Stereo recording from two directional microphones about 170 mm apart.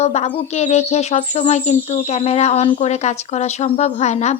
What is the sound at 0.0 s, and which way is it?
Speech, 40° left (ahead or behind).